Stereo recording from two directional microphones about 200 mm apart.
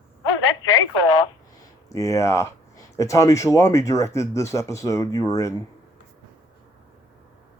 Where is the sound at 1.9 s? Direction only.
15° left (ahead or behind).